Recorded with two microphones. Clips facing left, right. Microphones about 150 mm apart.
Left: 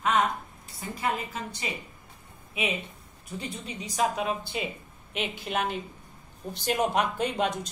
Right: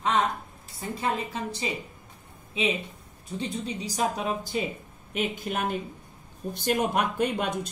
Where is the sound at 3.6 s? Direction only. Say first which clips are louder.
Left 3 dB; 35° right (ahead or behind).